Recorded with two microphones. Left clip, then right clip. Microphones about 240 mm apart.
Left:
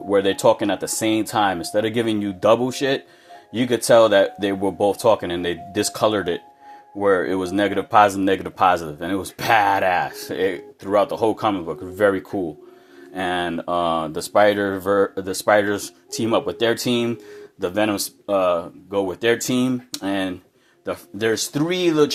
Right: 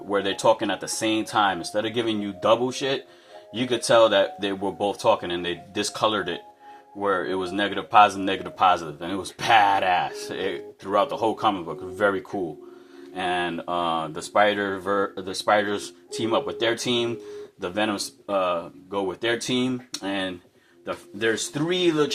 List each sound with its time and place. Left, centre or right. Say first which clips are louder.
0.1 s speech: left 4 dB; left